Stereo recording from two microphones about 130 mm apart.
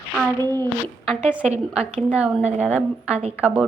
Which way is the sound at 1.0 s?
5° right (ahead or behind).